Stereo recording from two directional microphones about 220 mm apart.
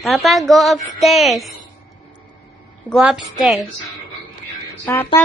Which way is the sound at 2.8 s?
Centre (ahead or behind).